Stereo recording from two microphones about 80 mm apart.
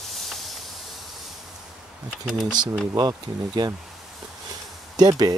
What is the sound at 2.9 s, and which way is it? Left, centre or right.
Speech, right.